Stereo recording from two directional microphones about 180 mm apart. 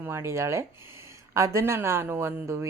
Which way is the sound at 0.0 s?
15° right (ahead or behind).